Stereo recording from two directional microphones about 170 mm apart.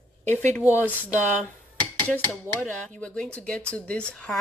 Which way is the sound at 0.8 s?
5° right (ahead or behind).